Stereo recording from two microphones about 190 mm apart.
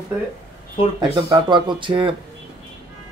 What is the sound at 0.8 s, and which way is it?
Speech, 30° left (ahead or behind).